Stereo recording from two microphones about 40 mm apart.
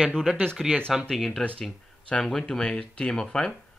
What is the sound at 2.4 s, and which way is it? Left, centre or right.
Speech, left.